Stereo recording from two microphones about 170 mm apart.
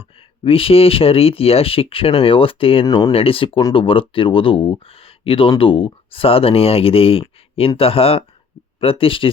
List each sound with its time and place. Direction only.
0.4 s speech: 35° left (ahead or behind)
2.8 s speech: 20° left (ahead or behind)
3.1 s speech: 35° left (ahead or behind)